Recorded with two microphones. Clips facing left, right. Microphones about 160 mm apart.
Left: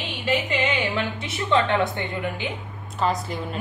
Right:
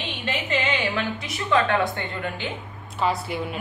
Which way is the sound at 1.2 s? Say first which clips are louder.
Even; 25° left (ahead or behind).